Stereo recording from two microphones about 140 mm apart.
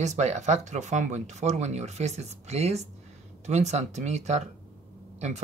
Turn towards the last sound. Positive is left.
turn(degrees=-50)  # may be behind; listen again after turning